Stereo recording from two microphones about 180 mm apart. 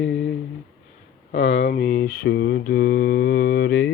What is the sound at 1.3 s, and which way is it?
Mantra, 75° left (ahead or behind).